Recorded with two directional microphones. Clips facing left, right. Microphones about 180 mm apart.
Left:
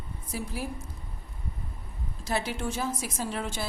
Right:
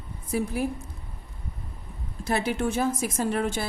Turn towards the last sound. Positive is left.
turn(degrees=-55)  # may be behind; listen again after turning